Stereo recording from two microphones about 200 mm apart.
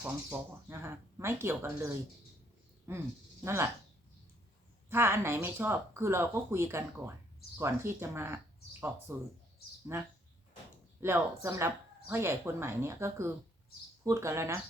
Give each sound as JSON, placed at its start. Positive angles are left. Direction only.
{"t": 0.0, "sound": "speech", "side_deg": -10}
{"t": 4.9, "sound": "speech", "side_deg": -10}